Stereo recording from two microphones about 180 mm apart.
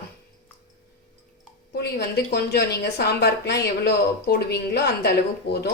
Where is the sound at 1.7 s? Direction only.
65° left (ahead or behind).